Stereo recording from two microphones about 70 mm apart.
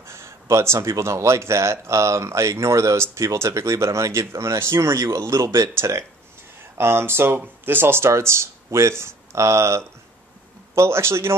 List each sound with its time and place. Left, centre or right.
0.0 s speech: right